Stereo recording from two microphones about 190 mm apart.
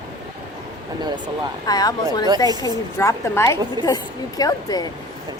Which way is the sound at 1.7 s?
20° left (ahead or behind).